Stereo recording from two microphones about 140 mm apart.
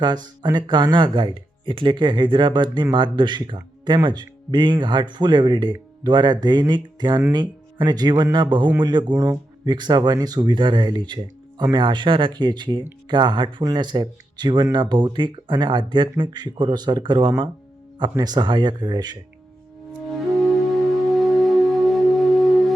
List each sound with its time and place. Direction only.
0.0 s speech: 30° right (ahead or behind)
9.1 s speech: 20° right (ahead or behind)
21.1 s music: centre (ahead or behind)